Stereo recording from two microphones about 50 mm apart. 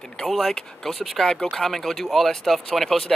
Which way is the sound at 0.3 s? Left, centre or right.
Centre.